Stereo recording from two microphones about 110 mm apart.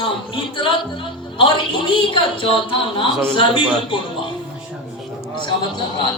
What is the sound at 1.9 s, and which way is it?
A woman's voice, 50° left (ahead or behind).